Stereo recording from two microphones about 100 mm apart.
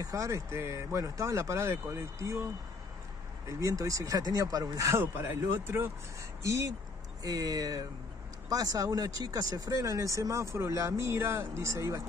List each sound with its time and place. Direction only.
0.0 s speech: 35° right (ahead or behind)
3.4 s speech: 35° right (ahead or behind)
7.2 s speech: 35° right (ahead or behind)